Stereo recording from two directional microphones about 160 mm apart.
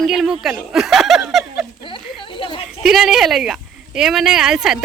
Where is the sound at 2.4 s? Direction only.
35° left (ahead or behind).